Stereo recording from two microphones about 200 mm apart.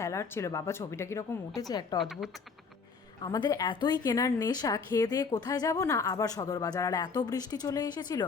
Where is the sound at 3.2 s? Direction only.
20° left (ahead or behind).